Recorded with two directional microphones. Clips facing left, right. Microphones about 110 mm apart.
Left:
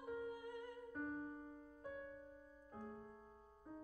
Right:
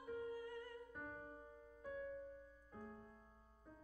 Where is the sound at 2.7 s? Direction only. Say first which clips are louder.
Left 3 dB; 30° left (ahead or behind).